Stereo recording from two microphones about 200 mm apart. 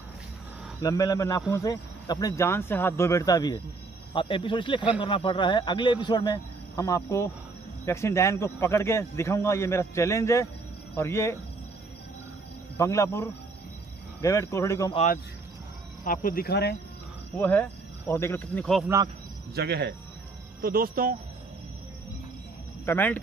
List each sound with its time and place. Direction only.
0.8 s a man's voice: 20° left (ahead or behind)
12.7 s speech: 15° left (ahead or behind)
16.0 s cricket: 40° left (ahead or behind)
17.4 s speech: 10° left (ahead or behind)
19.5 s speech: 55° right (ahead or behind)
22.8 s speech: 10° left (ahead or behind)